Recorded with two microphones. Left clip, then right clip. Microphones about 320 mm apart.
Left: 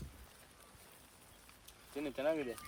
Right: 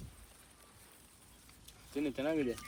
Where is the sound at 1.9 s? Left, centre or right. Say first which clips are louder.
Right 2 dB; left.